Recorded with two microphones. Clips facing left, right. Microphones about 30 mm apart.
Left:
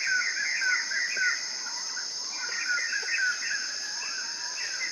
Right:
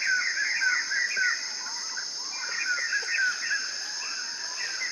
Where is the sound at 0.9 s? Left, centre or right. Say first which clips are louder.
Right 1 dB; centre.